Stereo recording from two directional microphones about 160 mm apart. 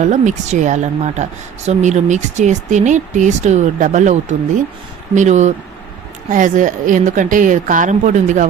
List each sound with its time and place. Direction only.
0.0 s a woman's voice: 50° right (ahead or behind)